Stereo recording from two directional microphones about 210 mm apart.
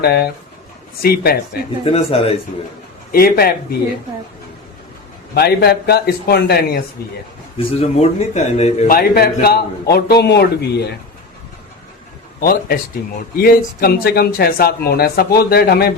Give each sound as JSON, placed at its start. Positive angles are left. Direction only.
{"t": 0.0, "sound": "speech", "side_deg": 50}
{"t": 1.8, "sound": "speech", "side_deg": 30}
{"t": 3.1, "sound": "speech", "side_deg": 45}
{"t": 5.3, "sound": "speech", "side_deg": 50}
{"t": 7.6, "sound": "a man's voice", "side_deg": 30}
{"t": 8.9, "sound": "speech", "side_deg": 45}
{"t": 12.4, "sound": "speech", "side_deg": 45}